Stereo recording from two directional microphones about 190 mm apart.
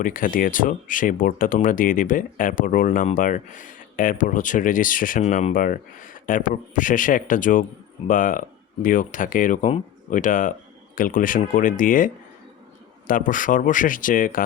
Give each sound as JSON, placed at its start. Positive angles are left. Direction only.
{"t": 0.0, "sound": "speech", "side_deg": 45}